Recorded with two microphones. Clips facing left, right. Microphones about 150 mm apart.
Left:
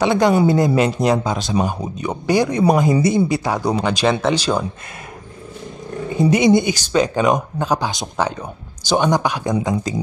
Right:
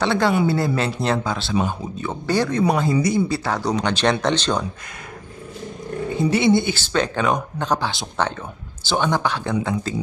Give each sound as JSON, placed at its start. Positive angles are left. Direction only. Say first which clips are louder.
{"t": 0.0, "sound": "speech", "louder": "left 4 dB", "side_deg": 15}
{"t": 6.3, "sound": "speech", "louder": "left 3 dB", "side_deg": 15}